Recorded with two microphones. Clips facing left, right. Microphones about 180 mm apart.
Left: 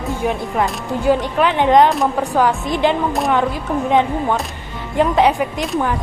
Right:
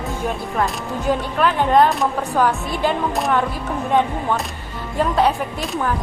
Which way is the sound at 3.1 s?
Centre (ahead or behind).